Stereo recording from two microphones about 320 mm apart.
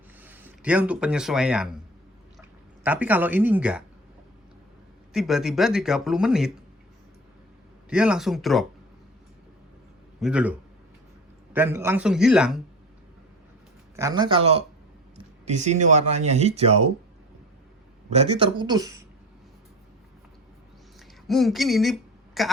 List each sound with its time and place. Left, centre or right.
0.2 s speech: centre
2.8 s speech: centre
5.1 s speech: centre
7.9 s speech: centre
10.2 s speech: centre
11.5 s speech: centre
13.9 s speech: centre
18.1 s speech: centre
21.2 s speech: centre